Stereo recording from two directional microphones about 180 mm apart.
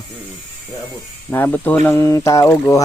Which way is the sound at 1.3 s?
10° left (ahead or behind).